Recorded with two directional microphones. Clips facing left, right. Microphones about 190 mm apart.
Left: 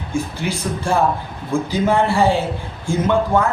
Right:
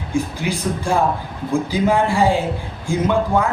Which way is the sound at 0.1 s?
15° right (ahead or behind).